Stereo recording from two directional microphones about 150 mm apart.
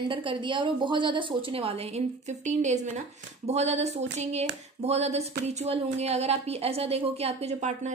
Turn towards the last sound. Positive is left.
turn(degrees=-50)  # may be behind; listen again after turning